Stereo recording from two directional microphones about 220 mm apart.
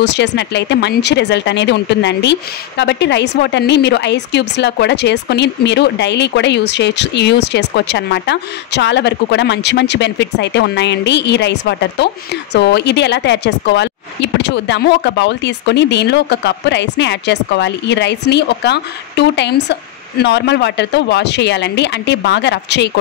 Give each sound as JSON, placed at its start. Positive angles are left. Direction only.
{"t": 0.0, "sound": "speech", "side_deg": 50}